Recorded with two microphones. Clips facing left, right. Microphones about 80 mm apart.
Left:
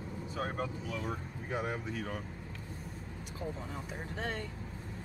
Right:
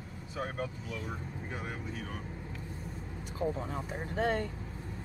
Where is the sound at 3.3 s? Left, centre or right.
Right.